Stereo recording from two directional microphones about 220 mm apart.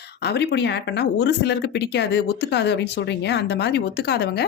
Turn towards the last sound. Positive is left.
turn(degrees=45)  # may be behind; listen again after turning